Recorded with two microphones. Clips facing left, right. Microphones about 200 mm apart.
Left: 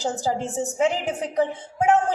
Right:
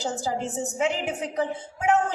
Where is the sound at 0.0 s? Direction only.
40° left (ahead or behind).